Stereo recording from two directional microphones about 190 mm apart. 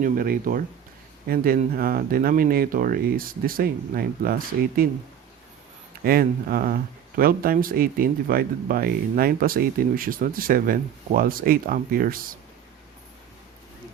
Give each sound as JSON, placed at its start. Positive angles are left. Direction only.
{"t": 0.0, "sound": "speech", "side_deg": -50}
{"t": 6.1, "sound": "speech", "side_deg": -50}